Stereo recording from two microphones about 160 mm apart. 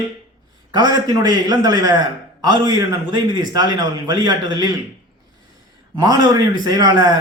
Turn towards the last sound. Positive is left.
turn(degrees=-25)  # may be behind; listen again after turning